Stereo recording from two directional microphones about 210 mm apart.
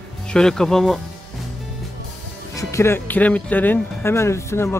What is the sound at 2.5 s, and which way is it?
Speech, 15° left (ahead or behind).